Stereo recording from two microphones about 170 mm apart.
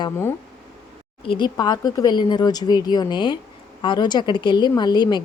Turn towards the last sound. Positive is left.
turn(degrees=25)  # may be behind; listen again after turning